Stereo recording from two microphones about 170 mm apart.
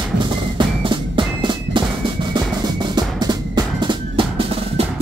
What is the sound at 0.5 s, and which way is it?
Music, 30° right (ahead or behind).